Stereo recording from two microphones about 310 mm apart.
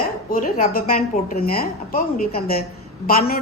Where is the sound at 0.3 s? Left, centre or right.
Left.